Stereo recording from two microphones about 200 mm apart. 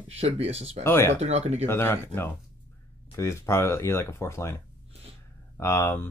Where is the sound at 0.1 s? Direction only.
30° right (ahead or behind).